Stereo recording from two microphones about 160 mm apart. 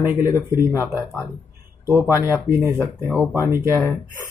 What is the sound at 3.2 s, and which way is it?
Speech, 15° right (ahead or behind).